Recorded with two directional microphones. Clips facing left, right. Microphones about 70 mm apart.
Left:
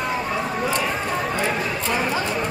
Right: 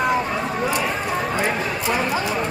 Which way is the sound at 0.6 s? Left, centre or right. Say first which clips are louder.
Right 1 dB; centre.